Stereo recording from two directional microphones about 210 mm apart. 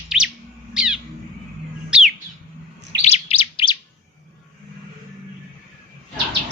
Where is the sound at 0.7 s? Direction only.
5° right (ahead or behind).